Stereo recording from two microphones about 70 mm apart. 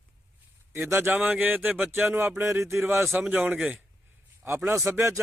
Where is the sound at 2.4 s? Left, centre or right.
Right.